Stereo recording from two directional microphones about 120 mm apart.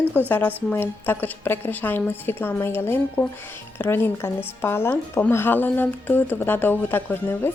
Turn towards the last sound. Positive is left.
turn(degrees=15)  # may be behind; listen again after turning